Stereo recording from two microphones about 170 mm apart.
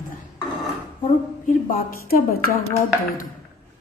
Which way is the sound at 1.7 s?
60° left (ahead or behind).